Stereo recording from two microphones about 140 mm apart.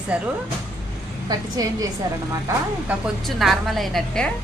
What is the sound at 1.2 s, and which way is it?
Speech, 25° right (ahead or behind).